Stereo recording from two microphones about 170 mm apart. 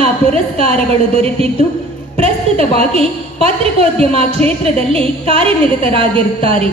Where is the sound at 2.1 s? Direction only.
35° right (ahead or behind).